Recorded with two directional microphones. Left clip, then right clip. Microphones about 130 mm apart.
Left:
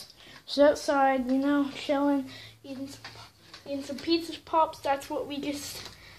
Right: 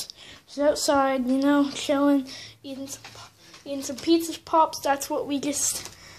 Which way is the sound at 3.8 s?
60° right (ahead or behind).